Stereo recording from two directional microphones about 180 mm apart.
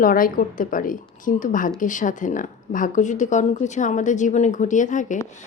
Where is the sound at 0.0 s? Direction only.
50° left (ahead or behind).